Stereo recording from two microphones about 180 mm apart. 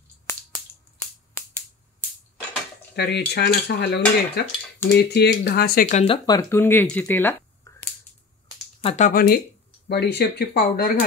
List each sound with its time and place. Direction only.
3.0 s cutlery: 65° left (ahead or behind)
4.8 s speech: 65° left (ahead or behind); by 6.0 s 50° left (ahead or behind)
6.0 s speech: 20° left (ahead or behind)
8.8 s speech: 40° left (ahead or behind)
9.1 s speech: 60° left (ahead or behind)